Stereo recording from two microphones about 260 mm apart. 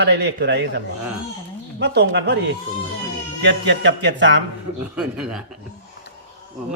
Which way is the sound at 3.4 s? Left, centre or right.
Right.